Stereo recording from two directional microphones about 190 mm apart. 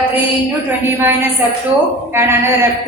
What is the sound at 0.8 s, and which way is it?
A woman's voice, 10° right (ahead or behind).